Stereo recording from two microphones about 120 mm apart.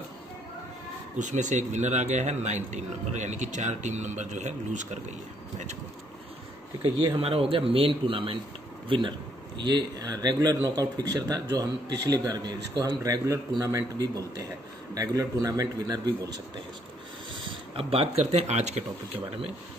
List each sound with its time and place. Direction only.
1.1 s a man's voice: 90° right
7.2 s a man's voice: 55° right (ahead or behind); by 16.0 s 30° right (ahead or behind)
17.3 s speech: 50° right (ahead or behind)